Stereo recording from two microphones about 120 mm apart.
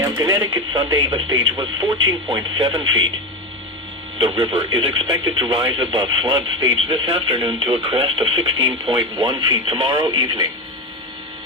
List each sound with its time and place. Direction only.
0.2 s speech: 30° right (ahead or behind)
4.2 s speech: 45° right (ahead or behind)